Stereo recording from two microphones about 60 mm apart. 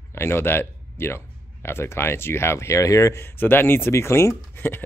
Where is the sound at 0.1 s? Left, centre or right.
Left.